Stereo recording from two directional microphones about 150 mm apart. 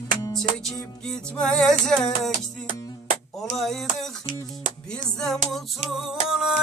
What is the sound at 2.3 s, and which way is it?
Music, 70° right (ahead or behind).